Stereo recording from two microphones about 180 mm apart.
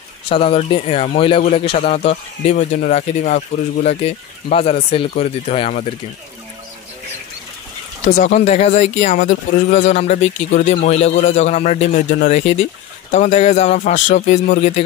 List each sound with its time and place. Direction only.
0.3 s speech: 30° left (ahead or behind)
8.2 s speech: 45° left (ahead or behind)